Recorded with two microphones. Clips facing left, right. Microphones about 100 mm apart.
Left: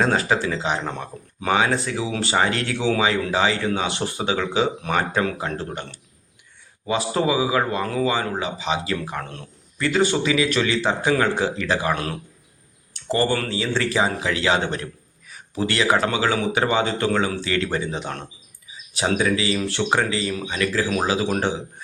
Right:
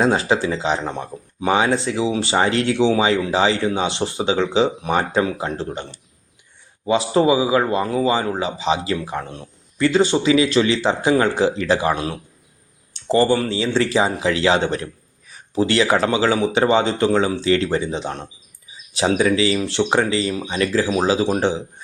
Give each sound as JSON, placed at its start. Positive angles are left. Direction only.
{"t": 0.0, "sound": "a man's voice", "side_deg": -20}
{"t": 6.8, "sound": "a man's voice", "side_deg": -25}